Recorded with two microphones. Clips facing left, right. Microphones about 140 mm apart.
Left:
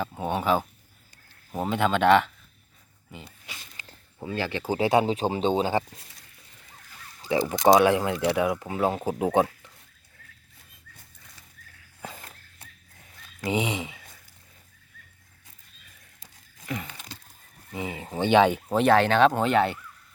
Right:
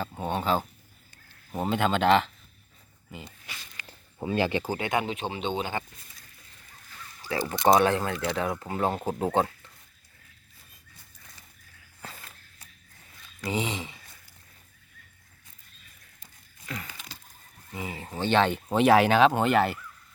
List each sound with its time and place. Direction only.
0.1 s speech: 5° left (ahead or behind)
3.8 s a sound: 20° right (ahead or behind)
4.8 s speech: 35° left (ahead or behind)
7.2 s speech: 20° left (ahead or behind)
13.4 s speech: 15° left (ahead or behind)
16.6 s a sound: 20° left (ahead or behind)
17.7 s speech: 20° left (ahead or behind); by 19.8 s centre (ahead or behind)